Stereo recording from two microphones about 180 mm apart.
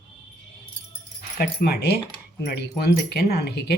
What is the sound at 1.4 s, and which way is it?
Speech, 60° left (ahead or behind).